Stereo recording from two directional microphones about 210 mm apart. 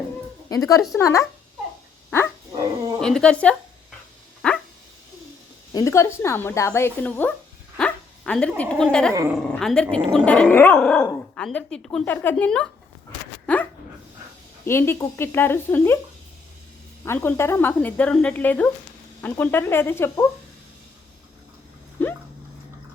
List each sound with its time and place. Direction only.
0.4 s a woman's voice: 15° left (ahead or behind)
2.0 s dog: 10° left (ahead or behind)
3.0 s speech: 5° left (ahead or behind)
4.4 s dog: 5° left (ahead or behind)
5.7 s speech: 15° left (ahead or behind)
11.0 s dog: 15° left (ahead or behind)
11.4 s speech: 5° left (ahead or behind)
14.6 s speech: 10° left (ahead or behind)
17.1 s speech: 10° left (ahead or behind)
22.0 s dog: 10° left (ahead or behind)